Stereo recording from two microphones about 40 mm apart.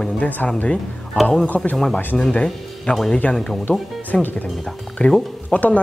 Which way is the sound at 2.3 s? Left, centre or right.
Left.